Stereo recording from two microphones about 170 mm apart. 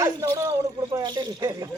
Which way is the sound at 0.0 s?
15° right (ahead or behind).